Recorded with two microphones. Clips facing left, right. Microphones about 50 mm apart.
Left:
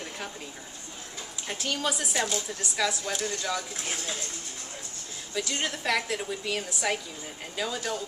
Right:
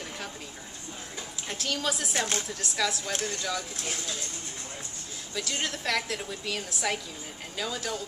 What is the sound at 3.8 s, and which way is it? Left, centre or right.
Speech, centre.